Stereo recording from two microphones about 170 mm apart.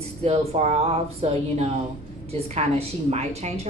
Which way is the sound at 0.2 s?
40° right (ahead or behind).